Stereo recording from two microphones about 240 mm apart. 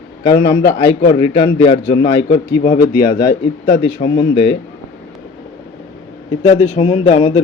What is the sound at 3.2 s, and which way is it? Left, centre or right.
Speech, left.